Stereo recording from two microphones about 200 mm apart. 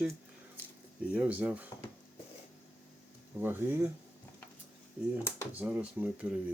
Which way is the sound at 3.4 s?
10° right (ahead or behind).